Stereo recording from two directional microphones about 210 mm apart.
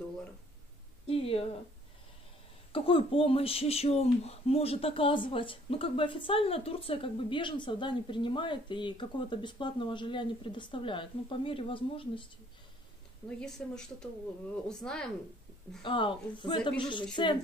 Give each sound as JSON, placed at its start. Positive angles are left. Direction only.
{"t": 1.0, "sound": "speech", "side_deg": 25}
{"t": 2.7, "sound": "speech", "side_deg": 25}
{"t": 13.4, "sound": "a woman's voice", "side_deg": 5}
{"t": 15.8, "sound": "speech", "side_deg": 25}